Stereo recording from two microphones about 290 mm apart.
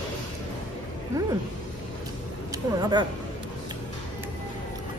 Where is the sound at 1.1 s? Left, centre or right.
Centre.